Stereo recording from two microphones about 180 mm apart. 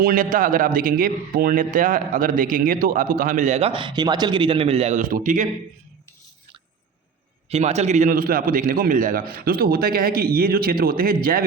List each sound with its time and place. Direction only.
0.0 s a man's voice: 50° right (ahead or behind)
7.5 s a man's voice: 40° right (ahead or behind); by 11.4 s 55° right (ahead or behind)